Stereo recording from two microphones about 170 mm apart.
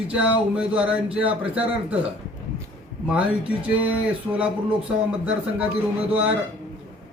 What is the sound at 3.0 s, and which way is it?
A man's voice, 5° right (ahead or behind).